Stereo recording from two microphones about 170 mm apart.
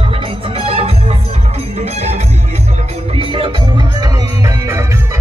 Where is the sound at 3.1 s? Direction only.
30° right (ahead or behind).